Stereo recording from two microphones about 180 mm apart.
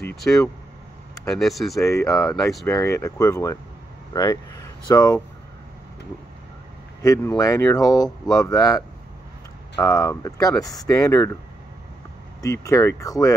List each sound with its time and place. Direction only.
0.1 s speech: centre (ahead or behind)
1.8 s speech: 15° left (ahead or behind)
2.0 s speech: 5° left (ahead or behind)
2.8 s speech: 15° left (ahead or behind)
7.0 s speech: 20° left (ahead or behind)
12.4 s speech: 15° left (ahead or behind)